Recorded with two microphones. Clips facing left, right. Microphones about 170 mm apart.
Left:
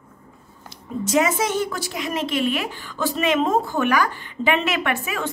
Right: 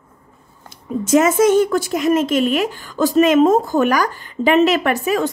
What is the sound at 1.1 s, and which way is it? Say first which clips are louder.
A woman's voice: right 8 dB; 50° right (ahead or behind).